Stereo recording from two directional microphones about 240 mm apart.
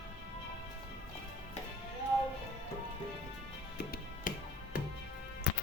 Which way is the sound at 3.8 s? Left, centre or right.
Left.